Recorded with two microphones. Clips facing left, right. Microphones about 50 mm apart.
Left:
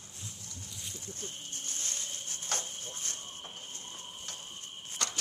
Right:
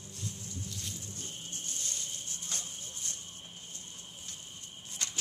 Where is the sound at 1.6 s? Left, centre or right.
Left.